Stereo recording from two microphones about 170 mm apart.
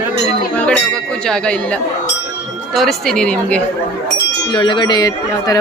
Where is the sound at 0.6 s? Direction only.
5° left (ahead or behind).